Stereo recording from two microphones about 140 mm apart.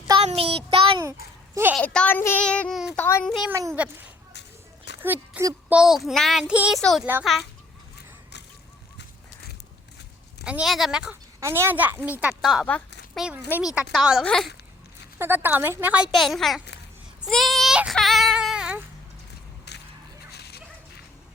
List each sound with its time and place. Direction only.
0.3 s child singing: 45° right (ahead or behind)
1.8 s a child's voice: 10° left (ahead or behind)
3.0 s a child's voice: 15° left (ahead or behind)
3.2 s a child's voice: centre (ahead or behind)
3.5 s a sound: 20° right (ahead or behind)
5.0 s a child's voice: 10° right (ahead or behind)
7.0 s a woman's voice: 15° right (ahead or behind)
10.4 s a child's voice: 5° right (ahead or behind)
11.3 s a woman's voice: 20° right (ahead or behind)
12.2 s a child's voice: centre (ahead or behind)
15.2 s a woman's voice: 15° right (ahead or behind)
16.1 s a child's voice: centre (ahead or behind)